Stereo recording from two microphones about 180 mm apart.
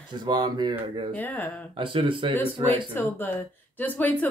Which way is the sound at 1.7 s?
30° right (ahead or behind).